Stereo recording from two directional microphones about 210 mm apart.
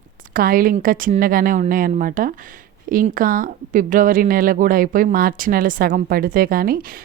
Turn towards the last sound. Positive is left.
turn(degrees=-45)  # may be behind; listen again after turning